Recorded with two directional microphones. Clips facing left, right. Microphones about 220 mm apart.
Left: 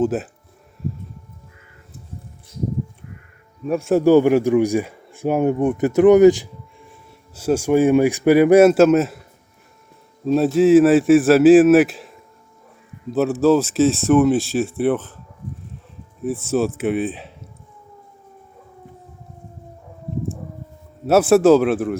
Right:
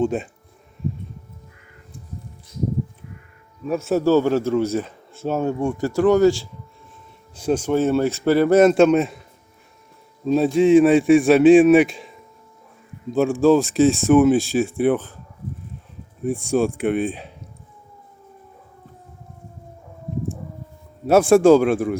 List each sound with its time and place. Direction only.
0.0 s speech: 5° left (ahead or behind)
3.8 s speech: 15° left (ahead or behind)
7.3 s speech: 5° left (ahead or behind)
10.2 s speech: centre (ahead or behind)
16.2 s speech: centre (ahead or behind)
21.1 s speech: 5° left (ahead or behind)